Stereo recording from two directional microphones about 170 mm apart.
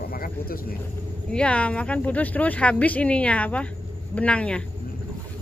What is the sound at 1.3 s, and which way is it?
Speech, 5° left (ahead or behind).